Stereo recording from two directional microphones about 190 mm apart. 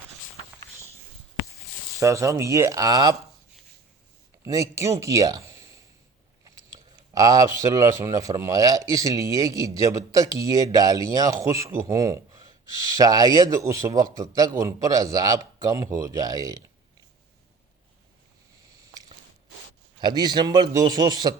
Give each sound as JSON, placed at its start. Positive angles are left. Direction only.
{"t": 2.0, "sound": "speech", "side_deg": -15}
{"t": 4.4, "sound": "speech", "side_deg": -15}
{"t": 20.0, "sound": "a man's voice", "side_deg": -20}